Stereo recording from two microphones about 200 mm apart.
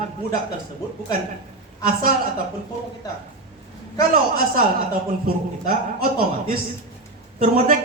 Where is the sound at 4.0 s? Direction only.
45° right (ahead or behind).